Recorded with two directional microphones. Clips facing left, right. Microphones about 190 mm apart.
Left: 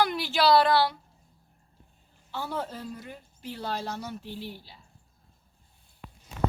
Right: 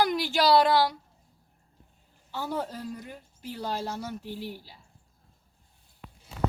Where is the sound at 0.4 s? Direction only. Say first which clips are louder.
Even; 15° right (ahead or behind).